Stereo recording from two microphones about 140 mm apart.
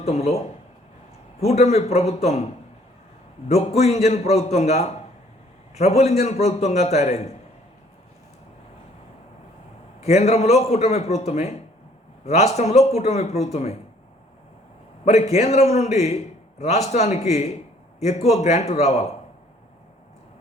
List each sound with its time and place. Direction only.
0.0 s a man's voice: 50° left (ahead or behind)
3.5 s a man's voice: 50° left (ahead or behind)
10.0 s a man's voice: 50° left (ahead or behind)
15.0 s a man's voice: 50° left (ahead or behind)